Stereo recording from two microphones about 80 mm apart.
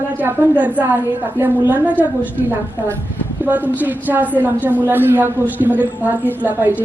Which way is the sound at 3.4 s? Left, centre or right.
Right.